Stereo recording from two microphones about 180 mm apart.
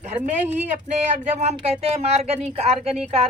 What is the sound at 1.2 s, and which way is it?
Speech, 40° right (ahead or behind).